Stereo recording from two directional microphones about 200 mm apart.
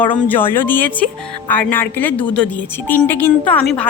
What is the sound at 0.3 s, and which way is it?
Speech, 10° left (ahead or behind).